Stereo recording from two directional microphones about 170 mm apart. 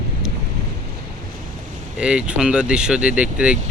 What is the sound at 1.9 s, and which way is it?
Speech, 5° right (ahead or behind).